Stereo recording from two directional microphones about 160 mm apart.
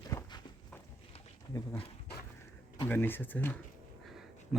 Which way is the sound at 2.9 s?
15° left (ahead or behind).